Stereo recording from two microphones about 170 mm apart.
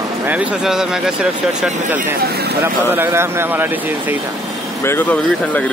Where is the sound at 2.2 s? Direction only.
70° right (ahead or behind).